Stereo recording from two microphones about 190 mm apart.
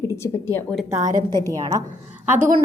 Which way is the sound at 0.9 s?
15° right (ahead or behind).